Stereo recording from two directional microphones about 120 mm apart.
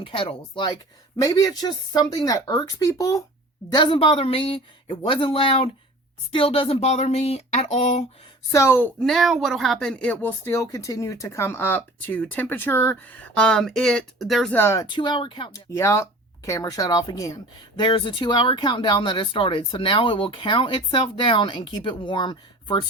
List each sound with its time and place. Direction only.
0.0 s speech: 50° left (ahead or behind)
1.2 s speech: 30° left (ahead or behind)
3.7 s speech: 45° left (ahead or behind); by 8.0 s 75° left (ahead or behind)
8.5 s speech: 20° left (ahead or behind)
9.0 s speech: centre (ahead or behind)
14.5 s speech: 20° left (ahead or behind)
14.9 s speech: 40° left (ahead or behind)
15.5 s speech: 25° left (ahead or behind)